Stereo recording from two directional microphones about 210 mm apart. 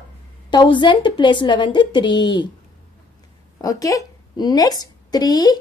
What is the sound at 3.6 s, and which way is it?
A woman's voice, 15° left (ahead or behind).